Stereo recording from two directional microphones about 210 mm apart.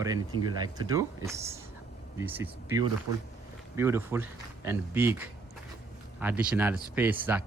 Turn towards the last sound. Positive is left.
turn(degrees=-10)  # may be behind; listen again after turning